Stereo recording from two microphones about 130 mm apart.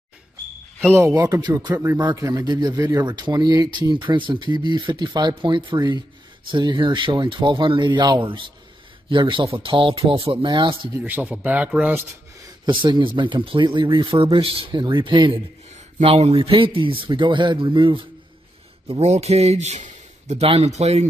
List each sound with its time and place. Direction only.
0.9 s a man's voice: 25° right (ahead or behind)
11.0 s speech: 15° right (ahead or behind)
12.6 s a man's voice: 35° right (ahead or behind)
16.0 s a man's voice: 50° right (ahead or behind)
18.9 s speech: 55° right (ahead or behind)